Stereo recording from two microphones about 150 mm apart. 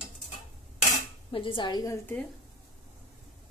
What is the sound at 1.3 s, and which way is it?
Speech, 35° left (ahead or behind).